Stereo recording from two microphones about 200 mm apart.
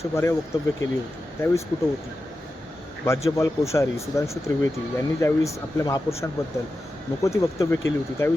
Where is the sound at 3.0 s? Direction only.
15° left (ahead or behind).